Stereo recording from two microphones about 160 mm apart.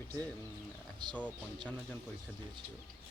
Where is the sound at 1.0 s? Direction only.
30° right (ahead or behind).